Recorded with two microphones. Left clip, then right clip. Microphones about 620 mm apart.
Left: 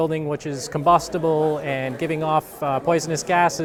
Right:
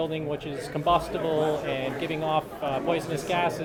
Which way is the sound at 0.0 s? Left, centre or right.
Left.